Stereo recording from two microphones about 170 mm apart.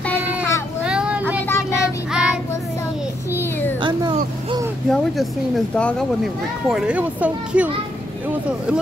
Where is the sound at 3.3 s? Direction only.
15° left (ahead or behind).